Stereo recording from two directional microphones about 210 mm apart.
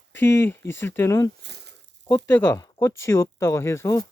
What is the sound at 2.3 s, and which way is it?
Speech, 10° left (ahead or behind).